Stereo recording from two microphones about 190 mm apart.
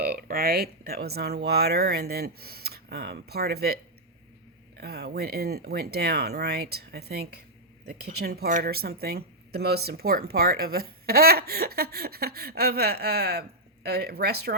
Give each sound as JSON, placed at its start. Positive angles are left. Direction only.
{"t": 0.0, "sound": "speech", "side_deg": -50}
{"t": 4.8, "sound": "speech", "side_deg": -60}